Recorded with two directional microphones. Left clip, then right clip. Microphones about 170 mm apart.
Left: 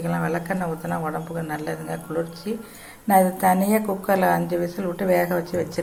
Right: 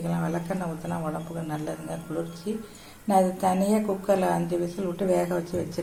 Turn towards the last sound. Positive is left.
turn(degrees=10)  # may be behind; listen again after turning